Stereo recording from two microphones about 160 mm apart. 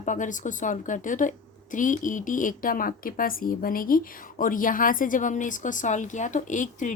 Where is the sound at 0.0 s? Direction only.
50° left (ahead or behind).